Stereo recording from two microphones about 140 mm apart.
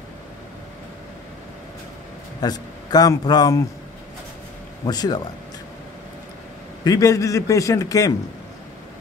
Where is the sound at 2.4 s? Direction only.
30° left (ahead or behind).